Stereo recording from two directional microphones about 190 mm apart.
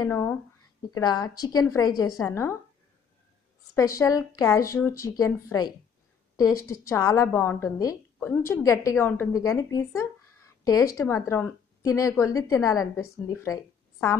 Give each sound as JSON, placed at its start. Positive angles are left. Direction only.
{"t": 0.0, "sound": "a woman's voice", "side_deg": 15}
{"t": 3.7, "sound": "a woman's voice", "side_deg": 15}